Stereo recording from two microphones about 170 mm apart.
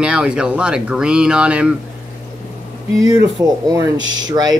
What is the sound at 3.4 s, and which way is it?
Speech, 20° right (ahead or behind).